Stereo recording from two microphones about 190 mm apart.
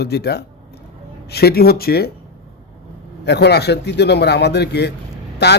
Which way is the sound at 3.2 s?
60° left (ahead or behind).